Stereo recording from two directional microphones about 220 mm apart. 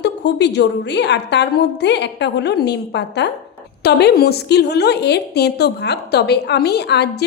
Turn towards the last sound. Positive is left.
turn(degrees=50)  # may be behind; listen again after turning